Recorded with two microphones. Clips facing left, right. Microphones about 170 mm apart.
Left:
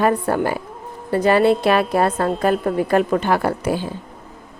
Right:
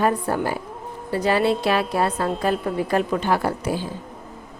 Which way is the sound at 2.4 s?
55° left (ahead or behind).